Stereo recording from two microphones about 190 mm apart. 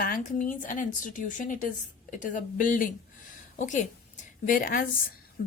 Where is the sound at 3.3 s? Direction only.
40° left (ahead or behind).